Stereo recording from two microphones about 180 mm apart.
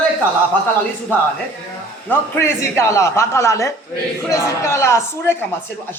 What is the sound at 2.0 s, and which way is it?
A man's voice, 15° left (ahead or behind).